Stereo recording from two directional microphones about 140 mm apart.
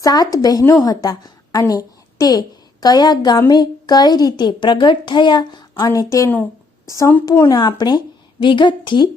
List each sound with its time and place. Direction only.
0.0 s a woman's voice: 25° left (ahead or behind)
6.3 s a sound: 10° left (ahead or behind)
6.9 s a woman's voice: 20° left (ahead or behind); by 9.0 s 35° left (ahead or behind)